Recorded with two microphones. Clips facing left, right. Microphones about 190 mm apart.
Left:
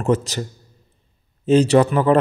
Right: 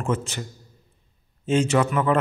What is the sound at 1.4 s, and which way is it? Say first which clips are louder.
Speech: left 7 dB; 35° left (ahead or behind).